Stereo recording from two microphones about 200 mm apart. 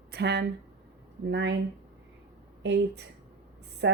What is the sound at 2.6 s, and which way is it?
Speech, 55° right (ahead or behind).